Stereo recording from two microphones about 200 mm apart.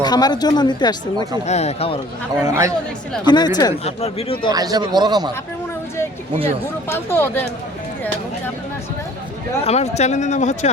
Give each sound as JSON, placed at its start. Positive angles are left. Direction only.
{"t": 0.0, "sound": "speech", "side_deg": 20}
{"t": 1.5, "sound": "speech", "side_deg": 35}
{"t": 2.4, "sound": "speech", "side_deg": -15}
{"t": 3.2, "sound": "speech", "side_deg": 20}
{"t": 4.5, "sound": "speech", "side_deg": -20}
{"t": 6.8, "sound": "speech", "side_deg": 10}
{"t": 9.6, "sound": "speech", "side_deg": 35}